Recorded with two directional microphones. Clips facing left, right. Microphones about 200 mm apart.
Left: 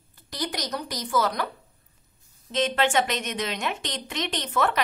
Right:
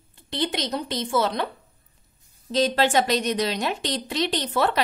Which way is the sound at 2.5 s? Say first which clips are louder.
Right 3 dB; 35° right (ahead or behind).